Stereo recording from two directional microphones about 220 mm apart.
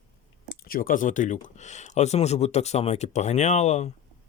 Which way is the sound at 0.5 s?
40° left (ahead or behind).